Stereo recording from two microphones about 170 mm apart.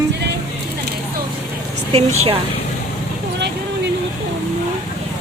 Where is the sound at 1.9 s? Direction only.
35° right (ahead or behind).